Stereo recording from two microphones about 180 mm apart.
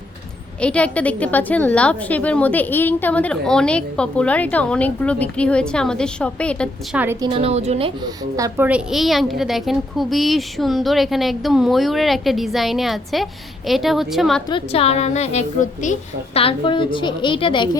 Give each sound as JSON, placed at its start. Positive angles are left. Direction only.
{"t": 0.6, "sound": "a woman's voice", "side_deg": 5}
{"t": 6.9, "sound": "a woman's voice", "side_deg": -10}
{"t": 7.2, "sound": "a woman's voice", "side_deg": -30}
{"t": 14.5, "sound": "a woman's voice", "side_deg": 35}